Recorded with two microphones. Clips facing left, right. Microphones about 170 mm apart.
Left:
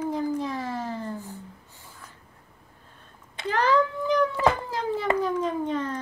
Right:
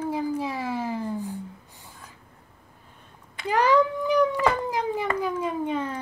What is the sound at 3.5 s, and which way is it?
Cat, 10° right (ahead or behind).